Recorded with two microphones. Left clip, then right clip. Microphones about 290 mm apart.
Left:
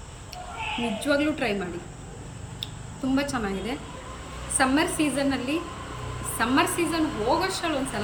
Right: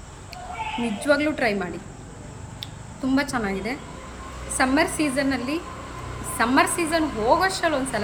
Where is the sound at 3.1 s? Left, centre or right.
Centre.